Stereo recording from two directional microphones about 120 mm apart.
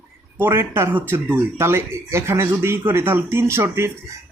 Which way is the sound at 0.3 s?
20° right (ahead or behind).